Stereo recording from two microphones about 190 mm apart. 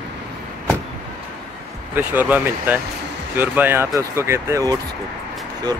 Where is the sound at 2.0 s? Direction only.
10° right (ahead or behind).